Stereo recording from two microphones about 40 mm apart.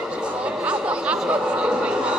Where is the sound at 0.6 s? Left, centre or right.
Right.